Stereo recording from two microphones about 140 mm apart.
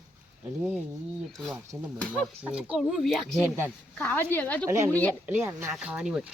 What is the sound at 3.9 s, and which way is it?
A woman's voice, 15° left (ahead or behind).